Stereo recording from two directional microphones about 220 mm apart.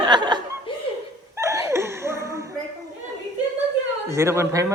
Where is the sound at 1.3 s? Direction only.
15° right (ahead or behind).